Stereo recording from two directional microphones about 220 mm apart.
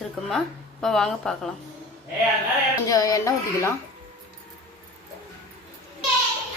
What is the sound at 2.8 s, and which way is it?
Speech, 15° left (ahead or behind).